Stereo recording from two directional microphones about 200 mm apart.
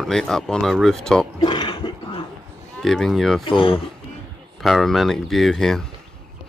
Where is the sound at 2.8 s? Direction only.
Centre (ahead or behind).